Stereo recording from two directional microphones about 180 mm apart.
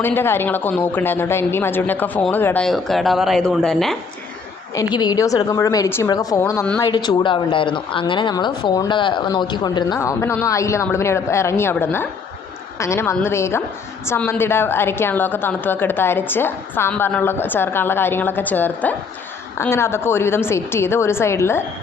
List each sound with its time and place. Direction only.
0.0 s a woman's voice: 10° left (ahead or behind)
4.7 s a woman's voice: 20° left (ahead or behind)